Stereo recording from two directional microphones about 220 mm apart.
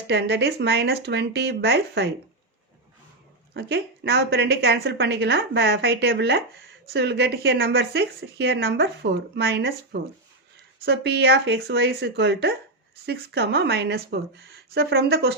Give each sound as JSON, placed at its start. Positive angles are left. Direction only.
{"t": 0.1, "sound": "speech", "side_deg": -50}
{"t": 3.5, "sound": "speech", "side_deg": -50}